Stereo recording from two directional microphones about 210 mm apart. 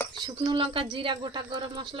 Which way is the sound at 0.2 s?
20° right (ahead or behind).